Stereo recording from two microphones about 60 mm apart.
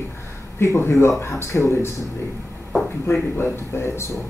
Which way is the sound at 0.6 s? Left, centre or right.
Left.